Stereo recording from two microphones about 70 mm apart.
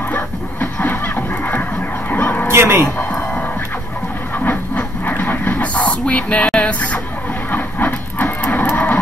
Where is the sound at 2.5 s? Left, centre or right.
Right.